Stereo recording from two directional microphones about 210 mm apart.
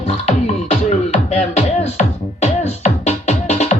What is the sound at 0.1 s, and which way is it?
Music, 30° left (ahead or behind).